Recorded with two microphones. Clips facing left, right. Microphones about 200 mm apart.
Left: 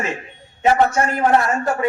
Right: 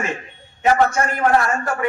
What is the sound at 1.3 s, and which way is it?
Speech, 25° left (ahead or behind).